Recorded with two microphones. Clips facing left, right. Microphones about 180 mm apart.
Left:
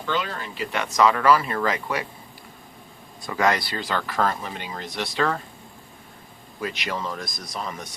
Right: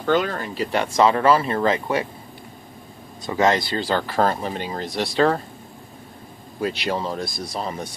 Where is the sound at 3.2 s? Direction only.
25° right (ahead or behind).